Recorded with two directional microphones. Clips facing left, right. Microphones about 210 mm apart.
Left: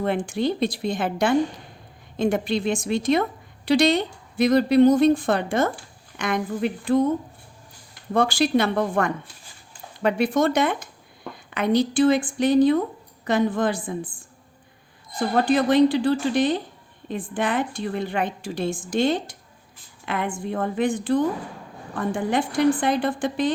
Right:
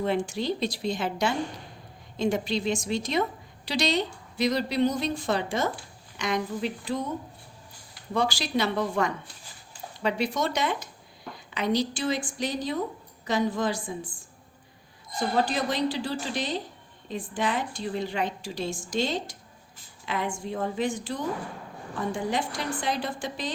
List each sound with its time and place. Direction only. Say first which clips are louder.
0.0 s a woman's voice: left 4 dB; 55° left (ahead or behind)
8.1 s a woman's voice: left 7 dB; 55° left (ahead or behind)
15.4 s a woman's voice: left 10 dB; 55° left (ahead or behind)